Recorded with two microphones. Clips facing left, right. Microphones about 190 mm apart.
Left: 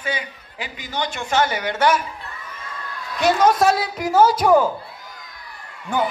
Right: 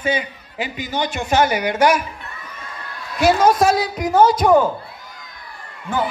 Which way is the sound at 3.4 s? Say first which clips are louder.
Right 2 dB; centre (ahead or behind).